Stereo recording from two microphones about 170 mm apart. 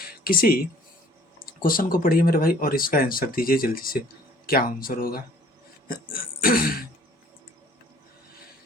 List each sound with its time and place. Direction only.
0.0 s a sound: 60° left (ahead or behind)
1.4 s speech: 55° left (ahead or behind)
5.9 s throat clearing: 55° left (ahead or behind)